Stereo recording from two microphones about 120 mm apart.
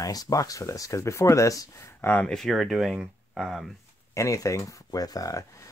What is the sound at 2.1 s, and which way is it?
Speech, 5° left (ahead or behind).